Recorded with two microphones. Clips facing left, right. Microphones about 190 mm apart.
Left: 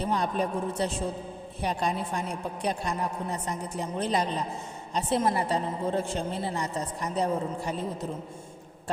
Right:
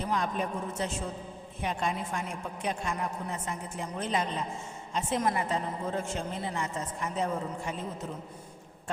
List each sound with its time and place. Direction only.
0.0 s a woman's voice: 35° left (ahead or behind)